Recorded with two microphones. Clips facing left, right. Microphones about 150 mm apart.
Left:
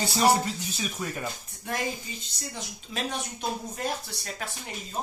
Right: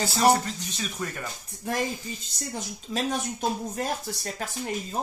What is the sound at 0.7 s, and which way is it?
Speech, 5° left (ahead or behind).